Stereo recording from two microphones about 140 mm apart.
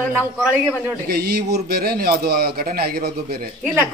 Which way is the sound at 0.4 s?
5° right (ahead or behind).